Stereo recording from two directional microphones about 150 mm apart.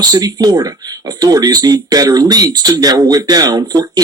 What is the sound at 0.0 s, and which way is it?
Speech, 25° right (ahead or behind).